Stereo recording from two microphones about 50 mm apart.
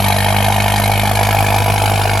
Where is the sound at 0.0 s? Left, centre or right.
Centre.